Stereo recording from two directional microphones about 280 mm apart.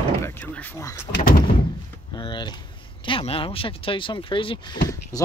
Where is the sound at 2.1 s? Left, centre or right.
Centre.